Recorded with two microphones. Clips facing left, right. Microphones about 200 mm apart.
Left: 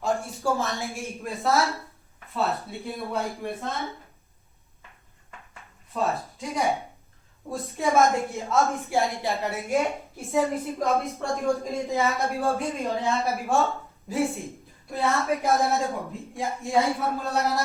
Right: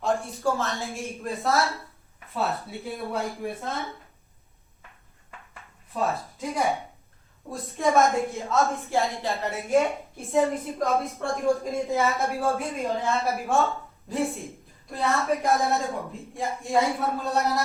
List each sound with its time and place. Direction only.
0.0 s speech: centre (ahead or behind)
0.5 s a woman's voice: 15° left (ahead or behind)
1.0 s a woman's voice: centre (ahead or behind)
5.9 s a woman's voice: centre (ahead or behind)
8.8 s a woman's voice: 15° left (ahead or behind)
9.7 s a woman's voice: centre (ahead or behind)